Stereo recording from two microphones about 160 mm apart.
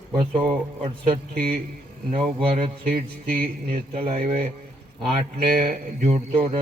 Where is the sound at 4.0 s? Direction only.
40° right (ahead or behind).